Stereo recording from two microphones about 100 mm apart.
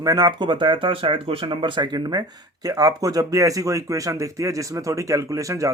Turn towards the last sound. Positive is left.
turn(degrees=-35)  # may be behind; listen again after turning